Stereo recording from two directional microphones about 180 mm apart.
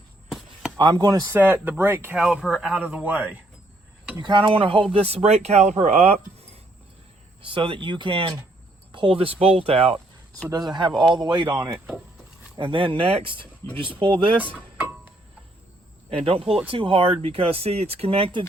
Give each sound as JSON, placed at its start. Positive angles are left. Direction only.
{"t": 0.3, "sound": "chop", "side_deg": 0}
{"t": 0.8, "sound": "speech", "side_deg": -25}
{"t": 4.2, "sound": "speech", "side_deg": -25}
{"t": 7.4, "sound": "speech", "side_deg": -30}
{"t": 12.5, "sound": "speech", "side_deg": -30}
{"t": 14.5, "sound": "music", "side_deg": -10}
{"t": 16.0, "sound": "speech", "side_deg": -35}